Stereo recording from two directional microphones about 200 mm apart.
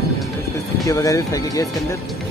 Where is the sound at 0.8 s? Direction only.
15° left (ahead or behind).